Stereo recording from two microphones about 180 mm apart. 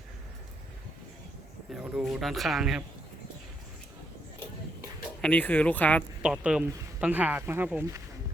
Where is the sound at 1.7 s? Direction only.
5° right (ahead or behind).